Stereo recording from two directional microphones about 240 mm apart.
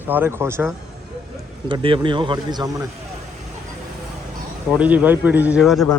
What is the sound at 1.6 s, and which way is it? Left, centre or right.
Speech, right.